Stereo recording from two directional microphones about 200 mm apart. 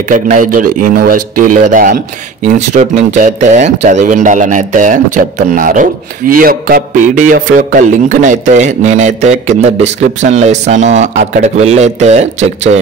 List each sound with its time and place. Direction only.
0.1 s a man's voice: 40° right (ahead or behind)